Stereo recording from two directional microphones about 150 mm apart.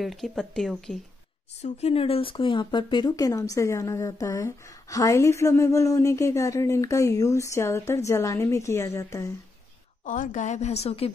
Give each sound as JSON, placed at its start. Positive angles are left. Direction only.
{"t": 0.0, "sound": "speech", "side_deg": 0}
{"t": 1.6, "sound": "speech", "side_deg": 45}
{"t": 10.0, "sound": "a woman's voice", "side_deg": 60}